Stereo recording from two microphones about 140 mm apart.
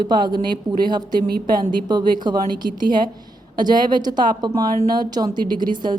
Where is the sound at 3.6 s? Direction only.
30° right (ahead or behind).